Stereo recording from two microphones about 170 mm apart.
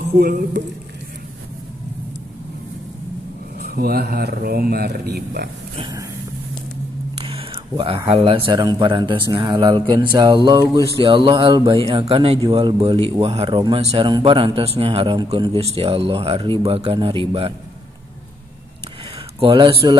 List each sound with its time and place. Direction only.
0.2 s speech: 75° right (ahead or behind)
3.5 s speech: 65° right (ahead or behind)
5.8 s speech: 25° right (ahead or behind)
7.2 s a sound: 35° right (ahead or behind)
8.1 s speech: 30° right (ahead or behind)
19.4 s speech: 30° right (ahead or behind)